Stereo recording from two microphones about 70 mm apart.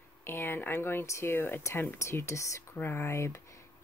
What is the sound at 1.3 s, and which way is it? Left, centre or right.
Speech, left.